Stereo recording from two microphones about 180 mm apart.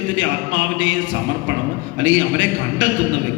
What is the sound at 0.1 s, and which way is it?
A man's voice, 90° right.